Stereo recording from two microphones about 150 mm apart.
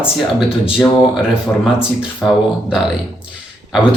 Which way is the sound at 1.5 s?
15° left (ahead or behind).